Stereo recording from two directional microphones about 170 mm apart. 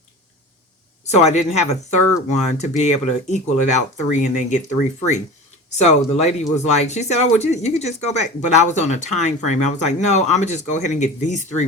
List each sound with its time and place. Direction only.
1.0 s speech: 40° left (ahead or behind)